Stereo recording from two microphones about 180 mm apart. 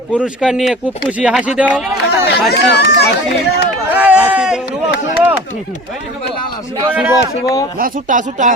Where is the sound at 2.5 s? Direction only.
65° left (ahead or behind).